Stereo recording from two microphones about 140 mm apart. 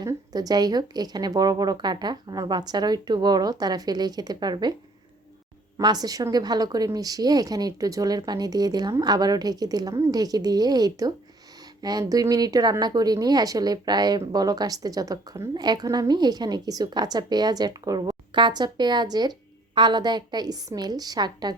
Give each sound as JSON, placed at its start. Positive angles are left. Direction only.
{"t": 0.0, "sound": "speech", "side_deg": -25}
{"t": 5.7, "sound": "speech", "side_deg": -30}